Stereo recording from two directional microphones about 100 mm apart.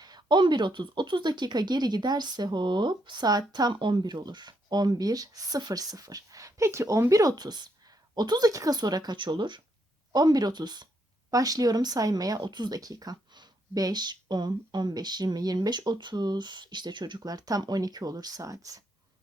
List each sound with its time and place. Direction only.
0.0 s speech: 45° right (ahead or behind)
10.1 s speech: 40° right (ahead or behind)